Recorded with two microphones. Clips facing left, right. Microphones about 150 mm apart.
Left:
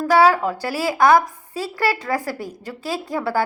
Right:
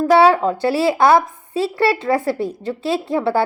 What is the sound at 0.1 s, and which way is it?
A woman's voice, 25° right (ahead or behind).